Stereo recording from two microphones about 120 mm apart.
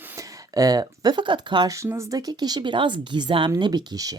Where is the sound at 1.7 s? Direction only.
25° right (ahead or behind).